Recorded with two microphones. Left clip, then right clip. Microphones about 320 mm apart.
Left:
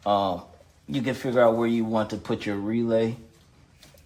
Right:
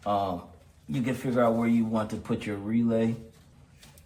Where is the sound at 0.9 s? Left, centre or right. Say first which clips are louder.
Left 3 dB; left.